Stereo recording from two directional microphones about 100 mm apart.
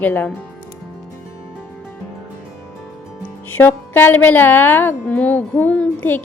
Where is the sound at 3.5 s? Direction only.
20° left (ahead or behind).